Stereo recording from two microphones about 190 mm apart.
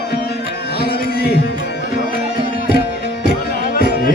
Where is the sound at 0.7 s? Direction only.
55° left (ahead or behind).